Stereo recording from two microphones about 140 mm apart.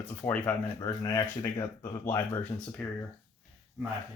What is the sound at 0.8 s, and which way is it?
Speech, 25° left (ahead or behind).